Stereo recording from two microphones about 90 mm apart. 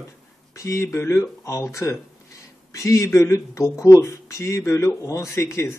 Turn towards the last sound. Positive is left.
turn(degrees=30)  # may be behind; listen again after turning